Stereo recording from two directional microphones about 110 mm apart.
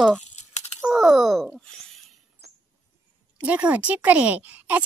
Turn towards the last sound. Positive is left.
turn(degrees=-15)  # may be behind; listen again after turning